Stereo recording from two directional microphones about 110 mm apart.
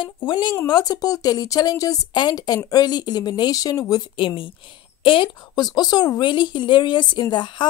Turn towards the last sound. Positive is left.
turn(degrees=45)  # may be behind; listen again after turning